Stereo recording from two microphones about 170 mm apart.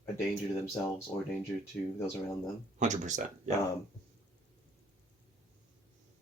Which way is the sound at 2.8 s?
45° right (ahead or behind).